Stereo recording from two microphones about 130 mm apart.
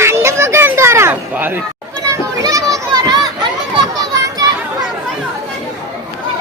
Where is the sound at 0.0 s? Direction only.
20° right (ahead or behind).